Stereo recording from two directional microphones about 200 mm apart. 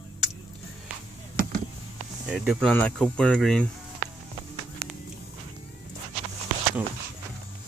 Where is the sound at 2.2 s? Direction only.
Centre (ahead or behind).